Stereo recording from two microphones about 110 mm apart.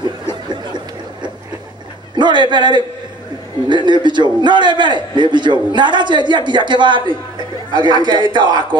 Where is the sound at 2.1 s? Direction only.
45° right (ahead or behind).